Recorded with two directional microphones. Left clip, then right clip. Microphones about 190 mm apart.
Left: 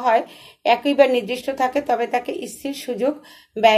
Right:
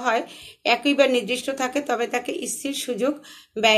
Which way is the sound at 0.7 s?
5° right (ahead or behind).